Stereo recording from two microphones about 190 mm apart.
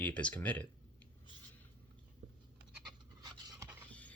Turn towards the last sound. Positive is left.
turn(degrees=5)  # may be behind; listen again after turning